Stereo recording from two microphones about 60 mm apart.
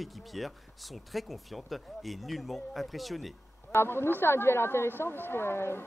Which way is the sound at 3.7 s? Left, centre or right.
Left.